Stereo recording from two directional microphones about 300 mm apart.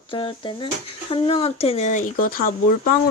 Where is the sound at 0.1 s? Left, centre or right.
Centre.